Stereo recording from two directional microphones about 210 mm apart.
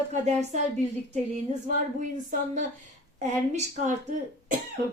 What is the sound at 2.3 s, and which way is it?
A woman's voice, 35° right (ahead or behind).